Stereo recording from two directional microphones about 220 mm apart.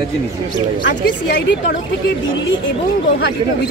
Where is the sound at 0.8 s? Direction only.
50° left (ahead or behind).